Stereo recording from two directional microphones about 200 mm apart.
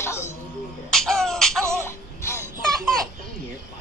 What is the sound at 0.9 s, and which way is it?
Music, centre (ahead or behind).